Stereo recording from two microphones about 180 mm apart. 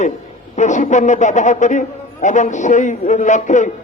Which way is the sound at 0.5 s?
40° left (ahead or behind).